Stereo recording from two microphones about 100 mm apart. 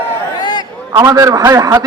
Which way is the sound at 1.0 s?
35° right (ahead or behind).